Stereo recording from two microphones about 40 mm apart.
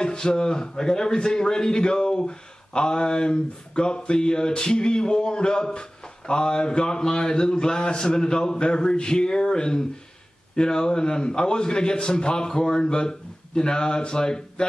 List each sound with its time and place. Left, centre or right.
0.0 s a man's voice: left